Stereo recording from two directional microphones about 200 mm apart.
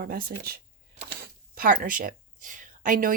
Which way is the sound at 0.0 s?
50° right (ahead or behind).